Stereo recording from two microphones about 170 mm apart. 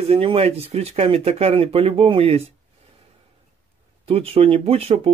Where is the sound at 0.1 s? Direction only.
35° right (ahead or behind).